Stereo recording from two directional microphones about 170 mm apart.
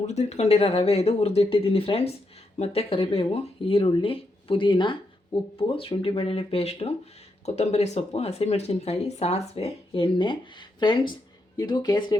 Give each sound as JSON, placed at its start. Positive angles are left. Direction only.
{"t": 0.1, "sound": "speech", "side_deg": 40}